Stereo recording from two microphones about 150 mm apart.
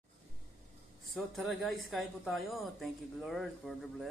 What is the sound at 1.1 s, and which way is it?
Speech, centre (ahead or behind).